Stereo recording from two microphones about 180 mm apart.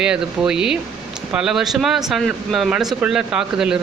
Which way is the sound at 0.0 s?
5° right (ahead or behind).